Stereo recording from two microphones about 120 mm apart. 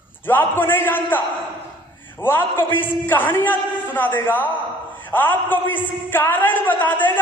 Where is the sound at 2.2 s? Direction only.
20° left (ahead or behind).